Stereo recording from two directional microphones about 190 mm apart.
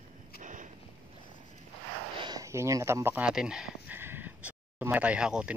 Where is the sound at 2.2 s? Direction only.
20° right (ahead or behind).